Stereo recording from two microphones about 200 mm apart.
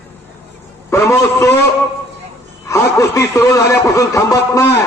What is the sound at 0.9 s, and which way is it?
Speech, 15° left (ahead or behind).